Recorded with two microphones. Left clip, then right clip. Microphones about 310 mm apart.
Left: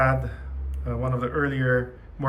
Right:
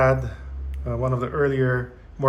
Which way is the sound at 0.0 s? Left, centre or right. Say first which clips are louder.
Right 3 dB; centre.